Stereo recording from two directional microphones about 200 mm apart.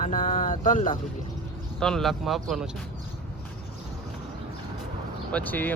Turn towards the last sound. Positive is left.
turn(degrees=10)  # may be behind; listen again after turning